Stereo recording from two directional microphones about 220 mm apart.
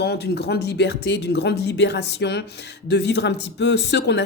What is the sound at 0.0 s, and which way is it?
Speech, 50° left (ahead or behind).